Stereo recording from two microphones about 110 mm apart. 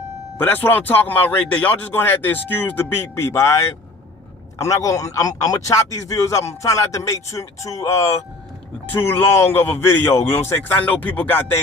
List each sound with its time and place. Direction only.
0.4 s speech: 15° left (ahead or behind)
8.9 s speech: 20° left (ahead or behind)